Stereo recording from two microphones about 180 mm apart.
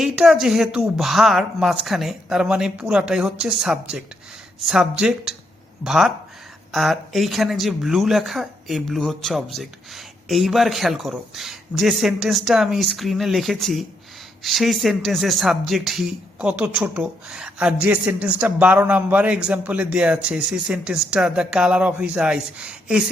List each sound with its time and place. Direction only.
0.0 s speech: centre (ahead or behind)